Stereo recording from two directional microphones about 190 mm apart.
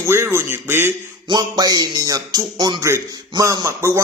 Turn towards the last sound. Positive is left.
turn(degrees=-15)  # may be behind; listen again after turning